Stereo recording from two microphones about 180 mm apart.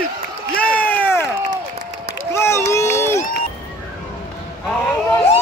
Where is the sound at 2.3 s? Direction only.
15° left (ahead or behind).